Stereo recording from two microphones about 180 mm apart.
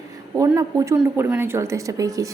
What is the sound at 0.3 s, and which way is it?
A woman's voice, 20° right (ahead or behind).